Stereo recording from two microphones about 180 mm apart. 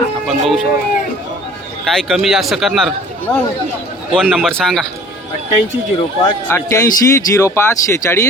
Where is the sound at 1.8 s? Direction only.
Centre (ahead or behind).